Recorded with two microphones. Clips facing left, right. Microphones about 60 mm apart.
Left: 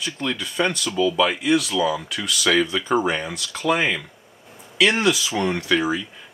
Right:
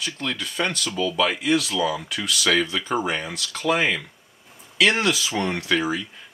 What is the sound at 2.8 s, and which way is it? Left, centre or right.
Speech, left.